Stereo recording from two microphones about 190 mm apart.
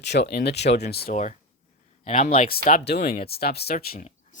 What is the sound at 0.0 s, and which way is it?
Speech, 60° left (ahead or behind).